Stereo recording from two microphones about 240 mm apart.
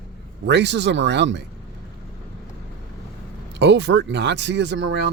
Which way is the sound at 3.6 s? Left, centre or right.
Right.